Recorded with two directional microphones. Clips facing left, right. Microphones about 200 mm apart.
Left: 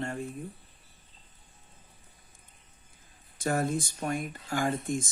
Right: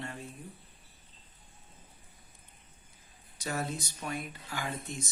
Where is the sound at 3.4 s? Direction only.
50° left (ahead or behind).